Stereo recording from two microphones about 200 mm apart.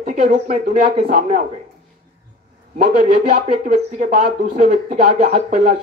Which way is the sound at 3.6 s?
40° right (ahead or behind).